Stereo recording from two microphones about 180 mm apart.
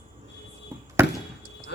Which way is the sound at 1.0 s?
15° right (ahead or behind).